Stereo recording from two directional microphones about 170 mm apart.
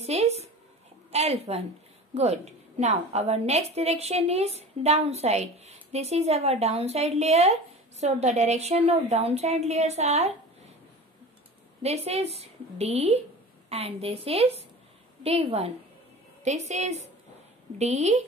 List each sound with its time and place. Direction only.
0.0 s a sound: 40° right (ahead or behind)
1.1 s a woman's voice: 40° right (ahead or behind)
11.8 s a woman's voice: 40° right (ahead or behind)